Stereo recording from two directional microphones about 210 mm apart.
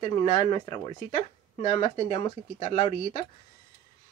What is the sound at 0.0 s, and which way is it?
Speech, 20° left (ahead or behind).